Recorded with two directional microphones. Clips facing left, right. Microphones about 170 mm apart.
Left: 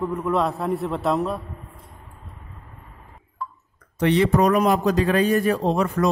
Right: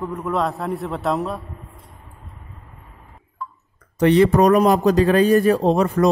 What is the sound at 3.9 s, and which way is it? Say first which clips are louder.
Speech: right 4 dB; 40° right (ahead or behind).